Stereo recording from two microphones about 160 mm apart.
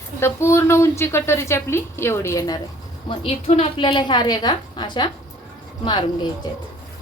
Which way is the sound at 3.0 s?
35° left (ahead or behind).